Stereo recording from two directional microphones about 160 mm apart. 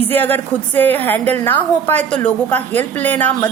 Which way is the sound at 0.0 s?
10° left (ahead or behind).